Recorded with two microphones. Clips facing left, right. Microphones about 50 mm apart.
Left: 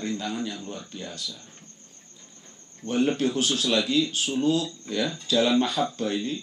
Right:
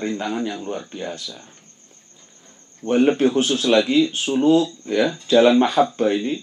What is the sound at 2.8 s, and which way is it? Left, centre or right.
Speech, right.